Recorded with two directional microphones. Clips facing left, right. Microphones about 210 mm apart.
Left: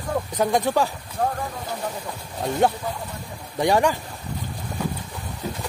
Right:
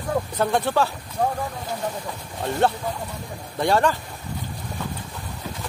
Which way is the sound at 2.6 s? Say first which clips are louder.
Even; 15° left (ahead or behind).